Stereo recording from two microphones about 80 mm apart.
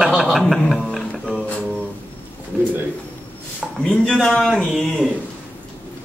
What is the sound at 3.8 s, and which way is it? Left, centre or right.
A man's voice, centre.